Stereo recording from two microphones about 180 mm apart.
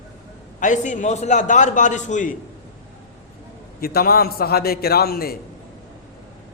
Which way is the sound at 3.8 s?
55° left (ahead or behind).